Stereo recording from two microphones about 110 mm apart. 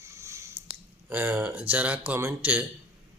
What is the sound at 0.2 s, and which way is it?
Squish, 25° right (ahead or behind).